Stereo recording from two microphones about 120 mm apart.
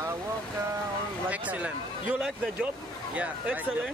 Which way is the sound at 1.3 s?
10° right (ahead or behind).